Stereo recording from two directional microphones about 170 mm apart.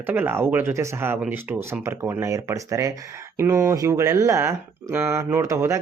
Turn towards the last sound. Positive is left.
turn(degrees=-15)  # may be behind; listen again after turning